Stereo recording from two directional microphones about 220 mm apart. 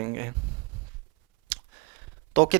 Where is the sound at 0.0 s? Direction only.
15° right (ahead or behind).